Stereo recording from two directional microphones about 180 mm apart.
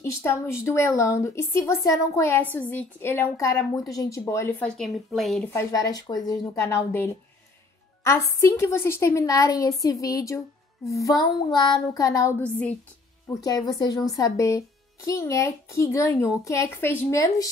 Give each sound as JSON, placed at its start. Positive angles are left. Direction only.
{"t": 0.0, "sound": "a woman's voice", "side_deg": 15}
{"t": 5.5, "sound": "child singing", "side_deg": 15}
{"t": 6.2, "sound": "a woman's voice", "side_deg": 15}
{"t": 11.0, "sound": "child singing", "side_deg": 20}
{"t": 13.3, "sound": "child singing", "side_deg": 20}
{"t": 15.0, "sound": "a woman's voice", "side_deg": 15}